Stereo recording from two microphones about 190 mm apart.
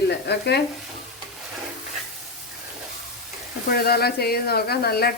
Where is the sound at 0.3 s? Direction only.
60° left (ahead or behind).